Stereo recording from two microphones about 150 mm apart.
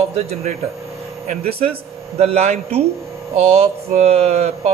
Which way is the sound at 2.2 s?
45° right (ahead or behind).